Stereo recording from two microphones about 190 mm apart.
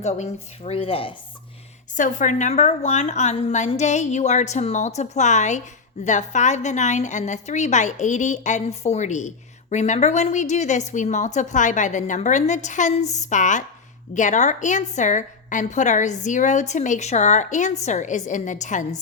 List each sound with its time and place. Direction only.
0.0 s a woman's voice: 35° left (ahead or behind)
2.0 s a woman's voice: 45° left (ahead or behind)